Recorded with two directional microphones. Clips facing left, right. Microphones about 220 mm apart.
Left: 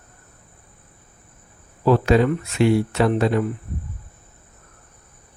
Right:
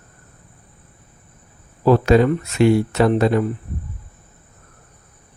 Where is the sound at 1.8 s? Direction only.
45° right (ahead or behind).